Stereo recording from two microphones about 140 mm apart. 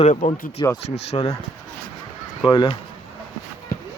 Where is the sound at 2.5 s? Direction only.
35° left (ahead or behind).